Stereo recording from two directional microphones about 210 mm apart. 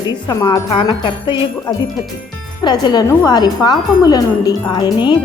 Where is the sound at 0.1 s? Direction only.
20° left (ahead or behind).